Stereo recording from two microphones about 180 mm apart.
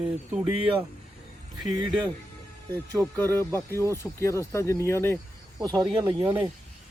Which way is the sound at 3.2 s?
15° left (ahead or behind).